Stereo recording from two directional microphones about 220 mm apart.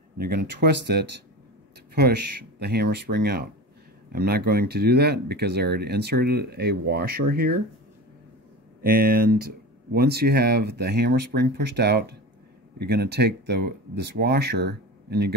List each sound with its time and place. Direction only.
0.2 s speech: 45° right (ahead or behind)
2.6 s speech: 45° right (ahead or behind)
8.8 s speech: 40° right (ahead or behind)